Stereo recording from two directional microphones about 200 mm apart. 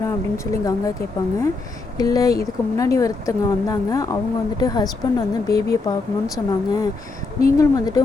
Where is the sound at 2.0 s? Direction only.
20° left (ahead or behind).